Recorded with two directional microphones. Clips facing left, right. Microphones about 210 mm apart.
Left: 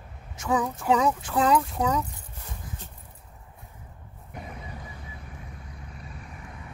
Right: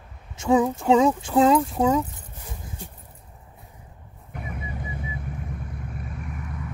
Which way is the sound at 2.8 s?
10° right (ahead or behind).